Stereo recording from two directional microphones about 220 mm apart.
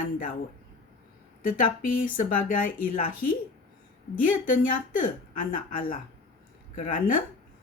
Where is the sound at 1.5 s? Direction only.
40° left (ahead or behind).